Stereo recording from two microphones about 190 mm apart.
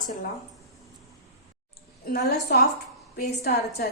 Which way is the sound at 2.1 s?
60° left (ahead or behind).